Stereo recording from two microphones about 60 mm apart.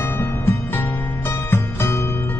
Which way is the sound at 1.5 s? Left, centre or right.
Left.